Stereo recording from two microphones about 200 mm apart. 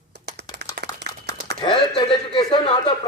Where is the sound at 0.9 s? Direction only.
20° left (ahead or behind).